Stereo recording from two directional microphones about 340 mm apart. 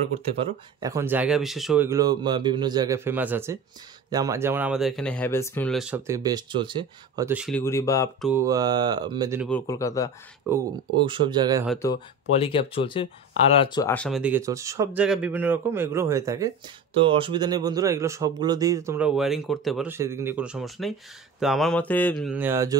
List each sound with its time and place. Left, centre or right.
0.7 s speech: centre
8.3 s speech: centre
9.5 s speech: centre
10.4 s speech: centre
11.6 s speech: centre
11.9 s speech: centre